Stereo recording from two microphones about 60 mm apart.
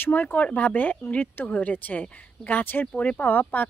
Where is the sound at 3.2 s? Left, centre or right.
Left.